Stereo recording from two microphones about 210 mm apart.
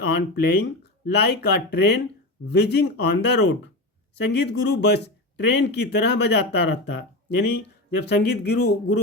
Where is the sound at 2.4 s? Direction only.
50° left (ahead or behind).